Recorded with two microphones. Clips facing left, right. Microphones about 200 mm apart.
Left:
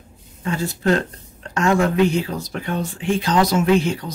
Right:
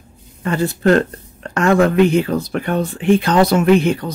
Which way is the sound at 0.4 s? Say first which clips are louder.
Right 6 dB; 60° right (ahead or behind).